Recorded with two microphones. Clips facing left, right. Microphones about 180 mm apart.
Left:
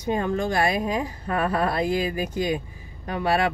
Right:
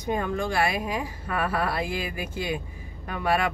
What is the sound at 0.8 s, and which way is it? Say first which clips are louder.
Speech: left 4 dB; 25° left (ahead or behind).